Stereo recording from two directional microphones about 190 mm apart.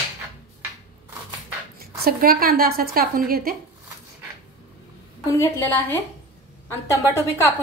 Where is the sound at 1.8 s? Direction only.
50° right (ahead or behind).